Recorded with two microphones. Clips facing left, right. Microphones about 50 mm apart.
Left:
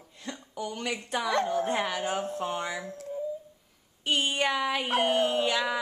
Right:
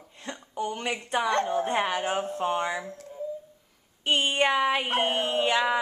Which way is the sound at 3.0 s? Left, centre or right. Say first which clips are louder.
Left 3 dB; centre.